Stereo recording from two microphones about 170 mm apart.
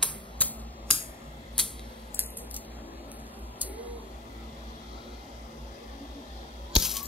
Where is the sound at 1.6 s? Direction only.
5° left (ahead or behind).